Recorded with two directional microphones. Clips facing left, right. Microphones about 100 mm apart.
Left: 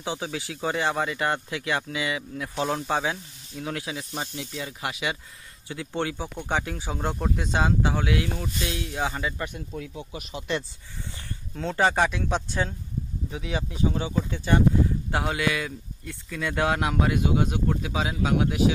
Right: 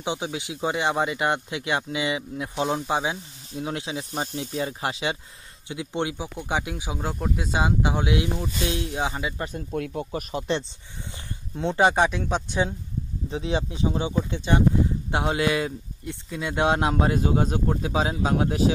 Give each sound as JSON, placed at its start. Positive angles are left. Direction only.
{"t": 0.0, "sound": "speech", "side_deg": -20}
{"t": 5.7, "sound": "speech", "side_deg": -15}
{"t": 9.4, "sound": "speech", "side_deg": -35}
{"t": 9.8, "sound": "speech", "side_deg": -55}
{"t": 11.5, "sound": "speech", "side_deg": -20}
{"t": 13.3, "sound": "speech", "side_deg": -30}